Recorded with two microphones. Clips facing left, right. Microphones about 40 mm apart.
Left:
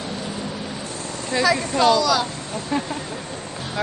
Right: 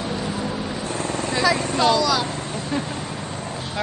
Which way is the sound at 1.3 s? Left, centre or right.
Centre.